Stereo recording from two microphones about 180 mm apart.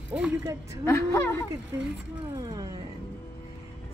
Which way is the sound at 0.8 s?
15° left (ahead or behind).